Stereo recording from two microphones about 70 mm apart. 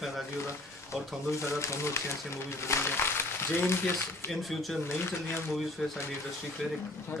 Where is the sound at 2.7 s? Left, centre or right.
Left.